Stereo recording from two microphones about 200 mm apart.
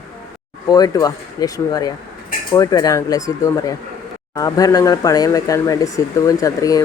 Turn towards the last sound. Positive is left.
turn(degrees=15)  # may be behind; listen again after turning